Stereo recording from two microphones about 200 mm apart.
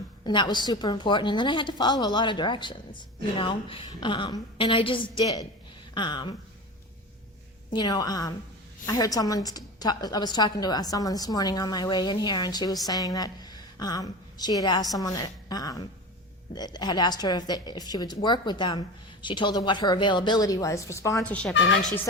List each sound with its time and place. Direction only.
0.3 s a woman's voice: 20° left (ahead or behind)
7.7 s a woman's voice: 20° left (ahead or behind); by 21.5 s 5° left (ahead or behind)